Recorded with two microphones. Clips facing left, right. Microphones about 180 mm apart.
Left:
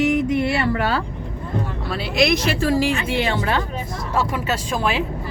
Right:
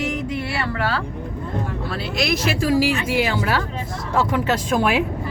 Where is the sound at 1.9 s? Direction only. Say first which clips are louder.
Left 5 dB; centre (ahead or behind).